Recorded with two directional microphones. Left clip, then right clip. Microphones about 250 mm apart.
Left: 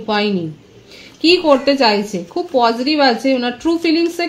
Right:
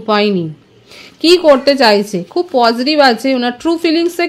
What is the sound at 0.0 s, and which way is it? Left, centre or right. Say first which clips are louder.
A woman's voice: right 5 dB; right.